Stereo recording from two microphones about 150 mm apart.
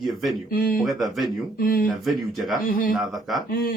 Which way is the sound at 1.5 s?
75° left (ahead or behind).